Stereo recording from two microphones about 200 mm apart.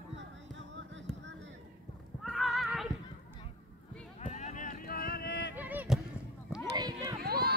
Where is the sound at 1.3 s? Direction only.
65° right (ahead or behind).